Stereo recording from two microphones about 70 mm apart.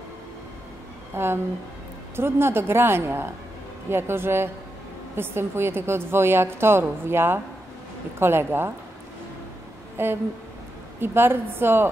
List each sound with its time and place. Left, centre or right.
1.1 s a woman's voice: right
10.0 s a woman's voice: right